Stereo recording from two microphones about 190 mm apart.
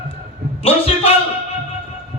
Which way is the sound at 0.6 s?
30° left (ahead or behind).